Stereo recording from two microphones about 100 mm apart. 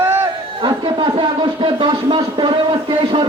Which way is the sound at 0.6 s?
60° right (ahead or behind).